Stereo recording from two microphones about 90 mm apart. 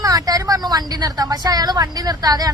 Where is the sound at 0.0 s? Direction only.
40° right (ahead or behind).